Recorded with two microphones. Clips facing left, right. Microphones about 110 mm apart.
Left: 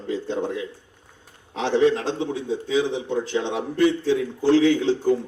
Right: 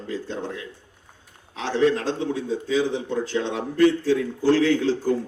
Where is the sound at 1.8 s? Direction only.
20° left (ahead or behind).